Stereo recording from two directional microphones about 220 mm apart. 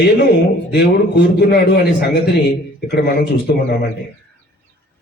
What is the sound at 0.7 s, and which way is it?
A man's voice, 50° left (ahead or behind).